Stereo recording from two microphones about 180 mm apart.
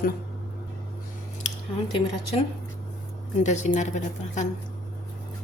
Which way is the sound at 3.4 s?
40° left (ahead or behind).